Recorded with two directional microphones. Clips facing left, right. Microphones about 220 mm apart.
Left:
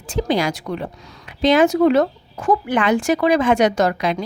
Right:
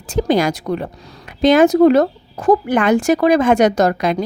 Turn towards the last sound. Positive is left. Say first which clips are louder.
# right 3 dB
turn(degrees=-45)  # may be behind; listen again after turning